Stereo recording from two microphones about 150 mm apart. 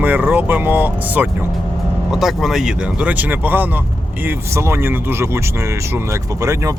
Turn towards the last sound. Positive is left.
turn(degrees=-20)  # may be behind; listen again after turning